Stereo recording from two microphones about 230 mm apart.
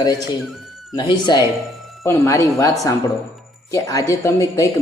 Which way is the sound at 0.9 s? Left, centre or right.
Centre.